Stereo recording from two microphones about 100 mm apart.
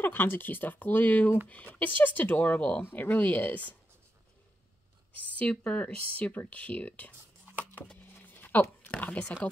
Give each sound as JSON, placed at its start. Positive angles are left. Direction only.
{"t": 0.0, "sound": "speech", "side_deg": 20}
{"t": 5.4, "sound": "speech", "side_deg": 10}
{"t": 7.8, "sound": "typing", "side_deg": 15}